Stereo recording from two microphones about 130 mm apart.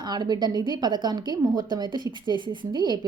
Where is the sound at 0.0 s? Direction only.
35° right (ahead or behind).